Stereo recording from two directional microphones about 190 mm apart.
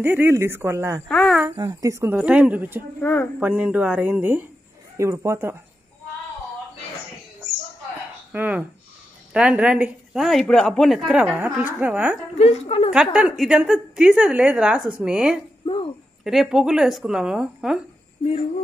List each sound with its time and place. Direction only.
0.0 s a woman's voice: 10° right (ahead or behind)
1.0 s a woman's voice: 5° left (ahead or behind)
1.6 s a woman's voice: 15° right (ahead or behind)
3.0 s speech: 10° left (ahead or behind)
3.3 s a woman's voice: 5° right (ahead or behind)
8.3 s a woman's voice: 5° right (ahead or behind)
12.4 s a woman's voice: 35° left (ahead or behind)
12.9 s a woman's voice: 5° right (ahead or behind)
15.6 s speech: 30° left (ahead or behind)
16.3 s a woman's voice: centre (ahead or behind)